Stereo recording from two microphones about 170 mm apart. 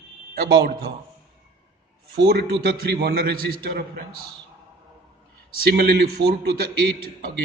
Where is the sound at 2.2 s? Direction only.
70° right (ahead or behind).